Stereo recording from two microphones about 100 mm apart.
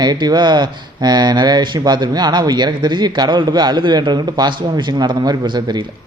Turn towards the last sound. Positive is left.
turn(degrees=-45)  # may be behind; listen again after turning